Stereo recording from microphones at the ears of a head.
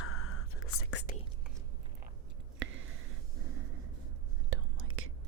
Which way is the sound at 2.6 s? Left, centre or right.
Right.